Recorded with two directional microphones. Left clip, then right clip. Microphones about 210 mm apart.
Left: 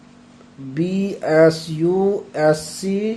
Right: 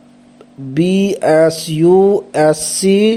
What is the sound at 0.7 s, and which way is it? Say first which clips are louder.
Speech: right 9 dB; 30° right (ahead or behind).